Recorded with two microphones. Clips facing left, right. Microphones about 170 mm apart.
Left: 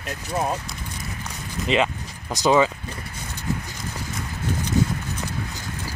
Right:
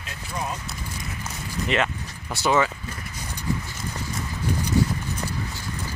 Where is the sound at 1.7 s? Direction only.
20° left (ahead or behind).